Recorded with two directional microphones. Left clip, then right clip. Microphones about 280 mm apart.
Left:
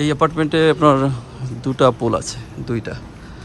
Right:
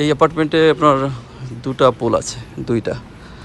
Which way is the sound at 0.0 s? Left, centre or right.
Centre.